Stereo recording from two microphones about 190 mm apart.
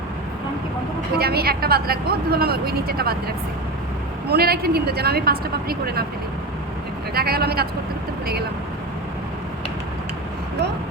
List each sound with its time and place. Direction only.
1.2 s speech: 55° right (ahead or behind)
7.1 s speech: 55° right (ahead or behind)